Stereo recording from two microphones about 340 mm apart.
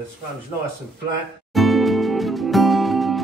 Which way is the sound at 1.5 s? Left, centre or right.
Centre.